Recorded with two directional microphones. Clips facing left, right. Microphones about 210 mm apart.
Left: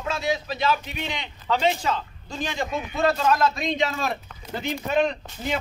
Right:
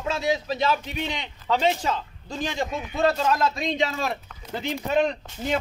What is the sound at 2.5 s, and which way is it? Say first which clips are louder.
A man's voice: left 2 dB; 25° right (ahead or behind).